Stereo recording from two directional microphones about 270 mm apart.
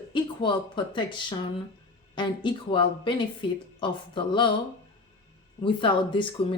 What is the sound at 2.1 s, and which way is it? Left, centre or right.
Speech, centre.